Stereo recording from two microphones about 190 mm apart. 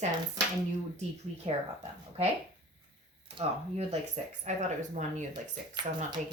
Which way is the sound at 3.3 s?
35° right (ahead or behind).